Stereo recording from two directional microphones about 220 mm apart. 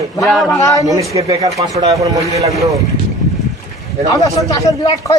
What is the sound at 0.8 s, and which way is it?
Speech, 15° right (ahead or behind).